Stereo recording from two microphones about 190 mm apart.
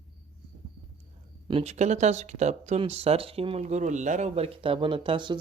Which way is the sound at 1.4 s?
30° right (ahead or behind).